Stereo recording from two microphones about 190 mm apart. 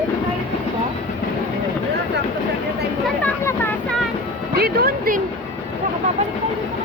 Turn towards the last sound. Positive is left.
turn(degrees=-50)  # may be behind; listen again after turning